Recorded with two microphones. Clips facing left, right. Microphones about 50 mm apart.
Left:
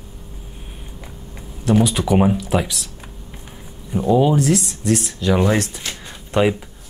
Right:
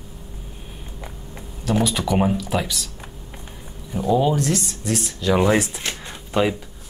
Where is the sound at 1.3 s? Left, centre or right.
Centre.